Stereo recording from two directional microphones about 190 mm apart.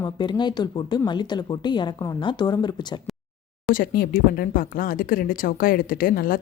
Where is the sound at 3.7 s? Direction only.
50° left (ahead or behind).